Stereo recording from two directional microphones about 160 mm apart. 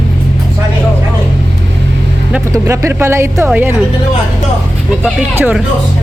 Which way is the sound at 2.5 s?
20° right (ahead or behind).